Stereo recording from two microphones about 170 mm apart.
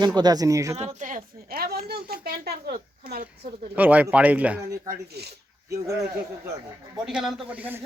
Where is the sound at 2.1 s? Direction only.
65° right (ahead or behind).